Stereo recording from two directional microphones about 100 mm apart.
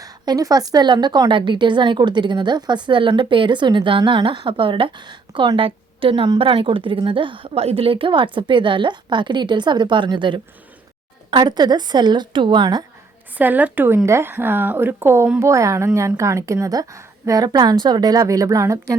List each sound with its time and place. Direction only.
0.0 s a woman's voice: 35° right (ahead or behind)
13.3 s a woman's voice: 15° right (ahead or behind); by 18.9 s 35° right (ahead or behind)